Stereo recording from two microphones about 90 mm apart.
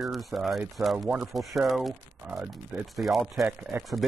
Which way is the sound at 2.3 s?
25° right (ahead or behind).